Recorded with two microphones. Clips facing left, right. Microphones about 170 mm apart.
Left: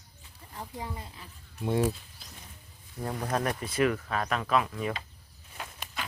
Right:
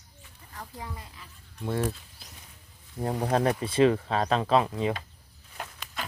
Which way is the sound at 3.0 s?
25° right (ahead or behind).